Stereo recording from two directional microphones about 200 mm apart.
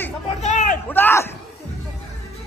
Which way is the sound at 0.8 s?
10° left (ahead or behind).